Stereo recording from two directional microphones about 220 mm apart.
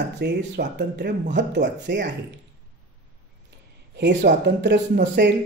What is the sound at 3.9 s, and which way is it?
Speech, 50° right (ahead or behind).